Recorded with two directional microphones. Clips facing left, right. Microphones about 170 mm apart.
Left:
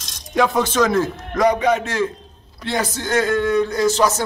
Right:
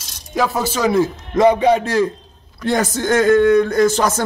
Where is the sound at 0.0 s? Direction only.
5° right (ahead or behind).